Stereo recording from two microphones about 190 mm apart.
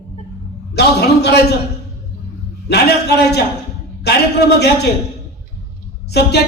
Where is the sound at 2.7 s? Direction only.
60° left (ahead or behind).